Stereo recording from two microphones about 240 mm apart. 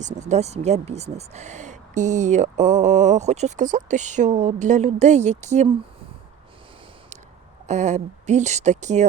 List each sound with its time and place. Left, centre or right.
0.0 s speech: right
7.7 s speech: right